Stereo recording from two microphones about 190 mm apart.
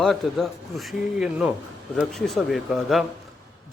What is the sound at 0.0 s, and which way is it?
A man's voice, centre (ahead or behind).